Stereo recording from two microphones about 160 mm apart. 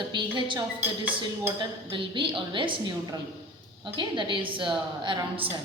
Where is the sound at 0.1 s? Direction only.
30° right (ahead or behind).